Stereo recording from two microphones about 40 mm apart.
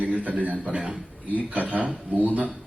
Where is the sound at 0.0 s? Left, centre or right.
Right.